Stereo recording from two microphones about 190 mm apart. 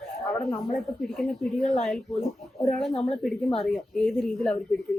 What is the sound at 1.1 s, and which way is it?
A woman's voice, centre (ahead or behind).